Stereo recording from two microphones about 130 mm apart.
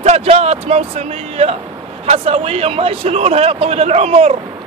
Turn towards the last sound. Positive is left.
turn(degrees=-55)  # may be behind; listen again after turning